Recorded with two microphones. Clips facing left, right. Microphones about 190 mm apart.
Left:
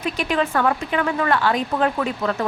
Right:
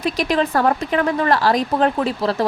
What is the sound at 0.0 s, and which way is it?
Speech, 35° right (ahead or behind).